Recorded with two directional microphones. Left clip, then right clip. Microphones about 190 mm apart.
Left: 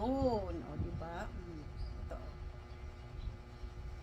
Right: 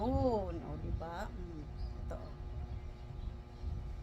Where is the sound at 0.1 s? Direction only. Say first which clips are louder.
Right 1 dB; 15° right (ahead or behind).